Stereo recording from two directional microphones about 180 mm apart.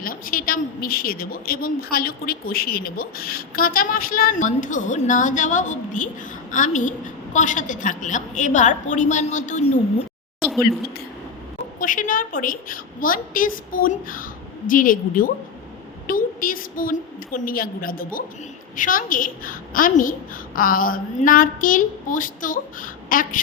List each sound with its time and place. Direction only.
0.0 s a woman's voice: 50° left (ahead or behind)
11.8 s a woman's voice: 45° left (ahead or behind)